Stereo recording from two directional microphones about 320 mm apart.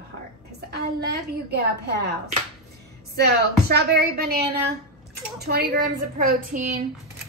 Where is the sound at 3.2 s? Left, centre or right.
Right.